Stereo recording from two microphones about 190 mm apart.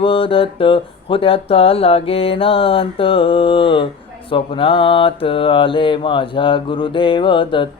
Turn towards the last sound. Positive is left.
turn(degrees=25)  # may be behind; listen again after turning